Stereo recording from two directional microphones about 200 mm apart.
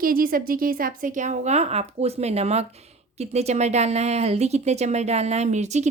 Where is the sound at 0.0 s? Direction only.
45° right (ahead or behind).